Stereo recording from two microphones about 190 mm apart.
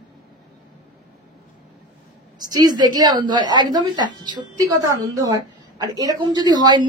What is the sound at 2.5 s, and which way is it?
A woman's voice, 20° right (ahead or behind).